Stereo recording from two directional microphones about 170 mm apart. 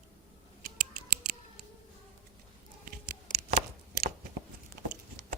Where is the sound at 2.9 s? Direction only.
60° right (ahead or behind).